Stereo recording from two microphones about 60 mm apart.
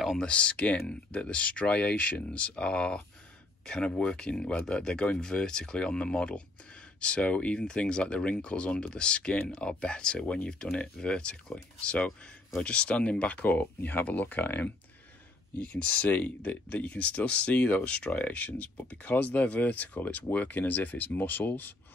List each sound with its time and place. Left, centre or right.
0.2 s speech: centre